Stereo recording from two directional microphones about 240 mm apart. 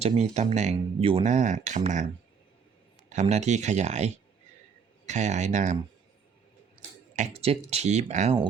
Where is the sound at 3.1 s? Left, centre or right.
Right.